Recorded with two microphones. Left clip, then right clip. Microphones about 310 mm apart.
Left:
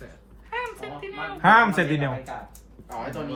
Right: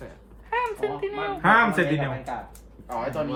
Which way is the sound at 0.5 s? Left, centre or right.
Right.